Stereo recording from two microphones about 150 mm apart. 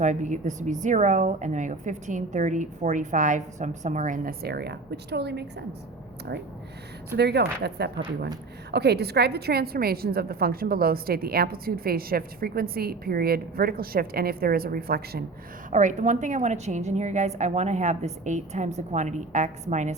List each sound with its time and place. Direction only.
0.0 s a woman's voice: 55° right (ahead or behind); by 5.5 s 90° right
7.2 s a woman's voice: 90° right
15.7 s a woman's voice: 55° right (ahead or behind)